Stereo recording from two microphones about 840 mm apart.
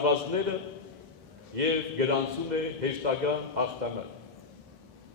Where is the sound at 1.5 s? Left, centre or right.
Right.